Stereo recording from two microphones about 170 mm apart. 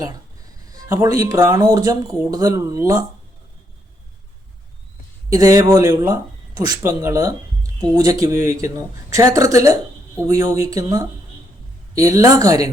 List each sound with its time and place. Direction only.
0.7 s speech: 20° right (ahead or behind)
5.3 s speech: 20° right (ahead or behind)